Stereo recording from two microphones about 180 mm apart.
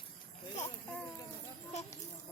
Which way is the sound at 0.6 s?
10° left (ahead or behind).